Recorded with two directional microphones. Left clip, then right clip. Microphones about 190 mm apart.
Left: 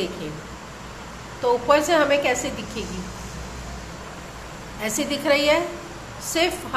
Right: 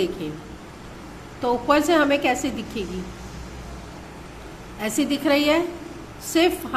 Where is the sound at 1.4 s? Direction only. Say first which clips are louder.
Left 1 dB; 20° right (ahead or behind).